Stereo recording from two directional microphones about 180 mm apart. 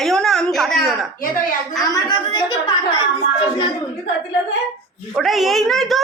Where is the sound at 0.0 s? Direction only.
Centre (ahead or behind).